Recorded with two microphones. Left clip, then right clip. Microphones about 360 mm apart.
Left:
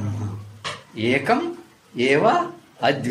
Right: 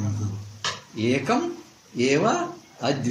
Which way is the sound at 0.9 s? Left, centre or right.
Left.